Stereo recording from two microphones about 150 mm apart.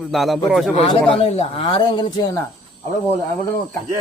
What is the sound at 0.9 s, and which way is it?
Speech, 40° left (ahead or behind).